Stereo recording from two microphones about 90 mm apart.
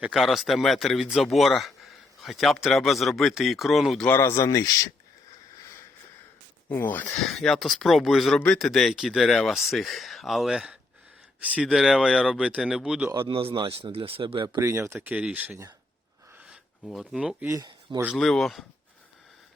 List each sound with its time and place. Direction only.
0.1 s speech: centre (ahead or behind)
4.1 s speech: 30° left (ahead or behind)
6.7 s speech: 25° left (ahead or behind)
7.1 s speech: 5° left (ahead or behind); by 11.7 s 15° right (ahead or behind)
11.7 s speech: 5° right (ahead or behind)
13.1 s speech: 80° right; by 14.6 s 60° right (ahead or behind)
14.6 s speech: 30° right (ahead or behind)
14.9 s speech: 15° right (ahead or behind)
16.8 s speech: centre (ahead or behind)